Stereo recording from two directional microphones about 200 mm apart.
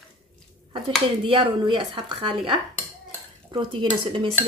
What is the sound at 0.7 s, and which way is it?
Dishes, 25° right (ahead or behind).